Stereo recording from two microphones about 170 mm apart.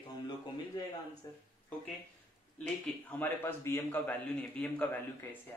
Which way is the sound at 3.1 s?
10° left (ahead or behind).